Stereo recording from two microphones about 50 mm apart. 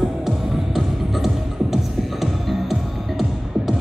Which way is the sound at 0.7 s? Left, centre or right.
Centre.